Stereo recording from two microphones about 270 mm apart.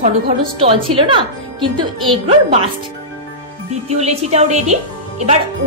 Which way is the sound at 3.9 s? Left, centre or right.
Right.